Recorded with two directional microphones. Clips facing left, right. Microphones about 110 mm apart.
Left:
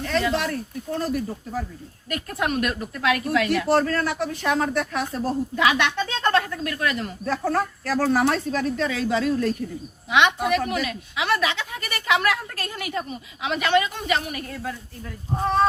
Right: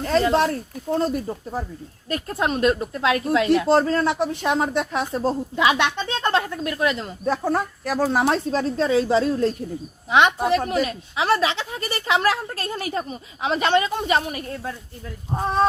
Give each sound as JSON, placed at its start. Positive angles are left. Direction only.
{"t": 0.0, "sound": "a woman's voice", "side_deg": -35}
{"t": 8.4, "sound": "a woman's voice", "side_deg": -30}